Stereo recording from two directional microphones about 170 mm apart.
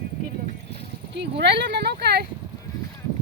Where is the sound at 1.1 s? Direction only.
85° right.